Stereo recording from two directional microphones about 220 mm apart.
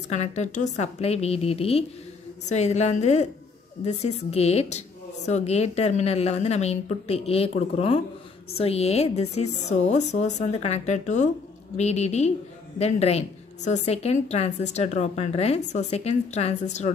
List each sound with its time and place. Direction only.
0.1 s a woman's voice: 30° left (ahead or behind)